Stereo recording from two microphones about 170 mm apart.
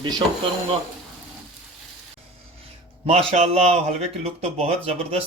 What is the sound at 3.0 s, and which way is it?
A man's voice, 35° right (ahead or behind).